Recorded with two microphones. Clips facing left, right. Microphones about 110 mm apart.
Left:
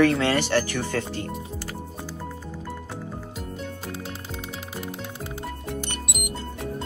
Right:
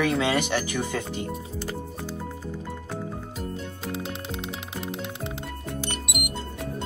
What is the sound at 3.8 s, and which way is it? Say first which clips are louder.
Music: right 3 dB; 20° right (ahead or behind).